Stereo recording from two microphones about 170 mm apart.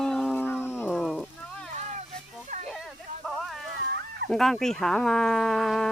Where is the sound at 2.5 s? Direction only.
45° right (ahead or behind).